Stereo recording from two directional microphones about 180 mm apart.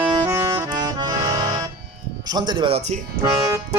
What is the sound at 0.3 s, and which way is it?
Accordion, 20° right (ahead or behind).